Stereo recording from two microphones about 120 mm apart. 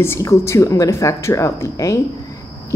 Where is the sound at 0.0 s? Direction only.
20° left (ahead or behind).